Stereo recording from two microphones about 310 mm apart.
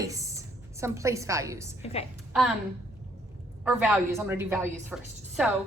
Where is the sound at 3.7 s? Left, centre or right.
Centre.